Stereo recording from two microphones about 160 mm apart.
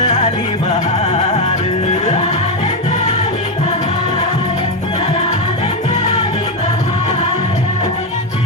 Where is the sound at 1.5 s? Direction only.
50° left (ahead or behind).